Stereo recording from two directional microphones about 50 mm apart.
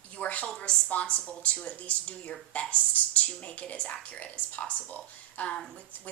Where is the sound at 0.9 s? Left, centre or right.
Left.